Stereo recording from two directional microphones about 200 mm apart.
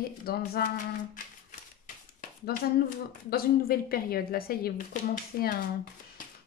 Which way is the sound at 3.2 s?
50° left (ahead or behind).